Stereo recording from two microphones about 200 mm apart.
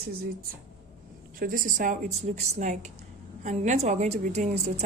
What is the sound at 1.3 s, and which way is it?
A woman's voice, 45° right (ahead or behind).